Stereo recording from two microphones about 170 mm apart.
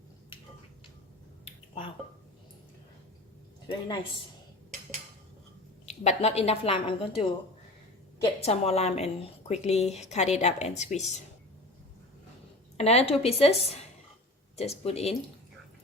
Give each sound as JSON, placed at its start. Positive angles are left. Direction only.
{"t": 1.5, "sound": "finger snapping", "side_deg": 30}
{"t": 3.7, "sound": "speech", "side_deg": 30}
{"t": 5.8, "sound": "a woman's voice", "side_deg": 40}
{"t": 12.7, "sound": "a woman's voice", "side_deg": 40}